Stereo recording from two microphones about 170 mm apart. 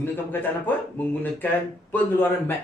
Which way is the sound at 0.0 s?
10° left (ahead or behind).